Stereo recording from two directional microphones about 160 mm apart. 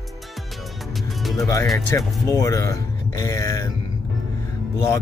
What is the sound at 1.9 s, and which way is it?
Speech, 20° left (ahead or behind).